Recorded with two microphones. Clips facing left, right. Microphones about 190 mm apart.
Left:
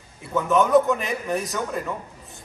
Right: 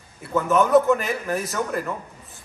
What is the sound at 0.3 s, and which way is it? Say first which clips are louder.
A man's voice: right 1 dB; centre (ahead or behind).